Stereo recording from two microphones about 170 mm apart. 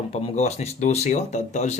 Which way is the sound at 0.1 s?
40° left (ahead or behind).